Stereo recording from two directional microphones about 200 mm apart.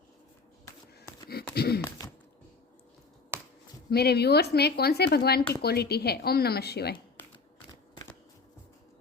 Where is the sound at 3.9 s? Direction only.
55° left (ahead or behind).